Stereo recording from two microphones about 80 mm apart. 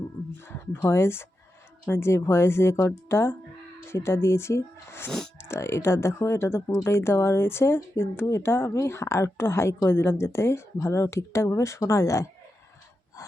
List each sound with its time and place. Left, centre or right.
0.4 s speech: left